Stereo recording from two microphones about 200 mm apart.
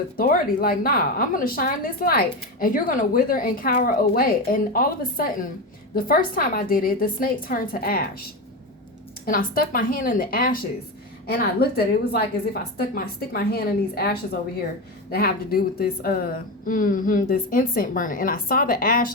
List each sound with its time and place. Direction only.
0.2 s a woman's voice: 45° left (ahead or behind)
9.2 s a woman's voice: 45° left (ahead or behind)
12.7 s a woman's voice: 45° left (ahead or behind)